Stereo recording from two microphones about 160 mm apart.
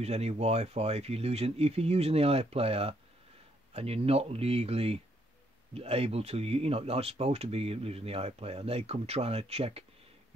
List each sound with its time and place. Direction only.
0.0 s speech: 40° right (ahead or behind)